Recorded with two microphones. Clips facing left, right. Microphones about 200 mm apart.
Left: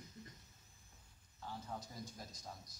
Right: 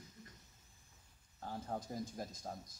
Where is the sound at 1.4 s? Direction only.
50° right (ahead or behind).